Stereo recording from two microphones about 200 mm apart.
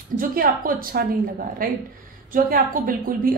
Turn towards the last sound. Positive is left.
turn(degrees=-45)  # may be behind; listen again after turning